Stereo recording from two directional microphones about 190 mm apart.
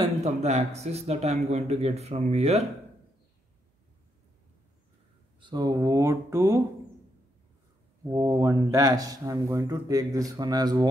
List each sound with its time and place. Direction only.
0.0 s speech: 35° right (ahead or behind)
5.4 s speech: 20° right (ahead or behind)
8.0 s speech: 15° right (ahead or behind)